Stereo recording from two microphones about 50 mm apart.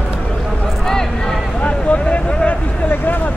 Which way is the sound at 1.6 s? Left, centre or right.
Left.